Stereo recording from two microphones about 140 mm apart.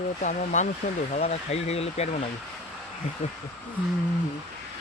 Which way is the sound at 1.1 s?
50° left (ahead or behind).